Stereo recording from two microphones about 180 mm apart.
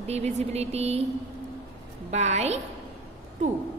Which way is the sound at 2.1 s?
40° right (ahead or behind).